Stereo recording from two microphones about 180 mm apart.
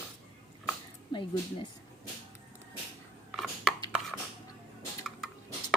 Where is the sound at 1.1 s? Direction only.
25° left (ahead or behind).